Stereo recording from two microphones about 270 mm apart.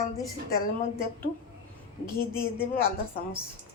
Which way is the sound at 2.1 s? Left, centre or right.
Centre.